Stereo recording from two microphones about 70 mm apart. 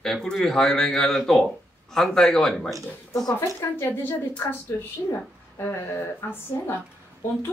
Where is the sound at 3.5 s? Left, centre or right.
Left.